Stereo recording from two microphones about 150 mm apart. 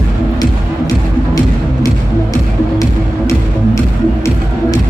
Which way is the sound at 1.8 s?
20° left (ahead or behind).